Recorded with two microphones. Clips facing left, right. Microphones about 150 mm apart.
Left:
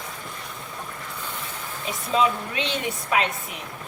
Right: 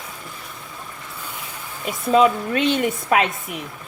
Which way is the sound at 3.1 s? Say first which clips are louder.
Right 4 dB; 55° right (ahead or behind).